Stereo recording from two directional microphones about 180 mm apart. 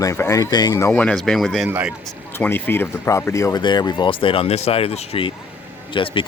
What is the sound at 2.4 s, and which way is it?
Speech, 10° left (ahead or behind).